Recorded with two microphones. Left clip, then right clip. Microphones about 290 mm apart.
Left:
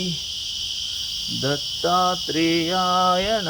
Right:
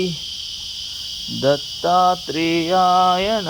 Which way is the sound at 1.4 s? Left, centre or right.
Centre.